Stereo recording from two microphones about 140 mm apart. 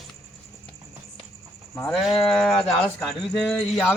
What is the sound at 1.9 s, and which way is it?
Speech, centre (ahead or behind).